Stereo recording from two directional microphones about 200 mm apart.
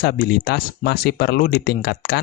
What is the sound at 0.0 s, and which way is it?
Speech, 50° left (ahead or behind).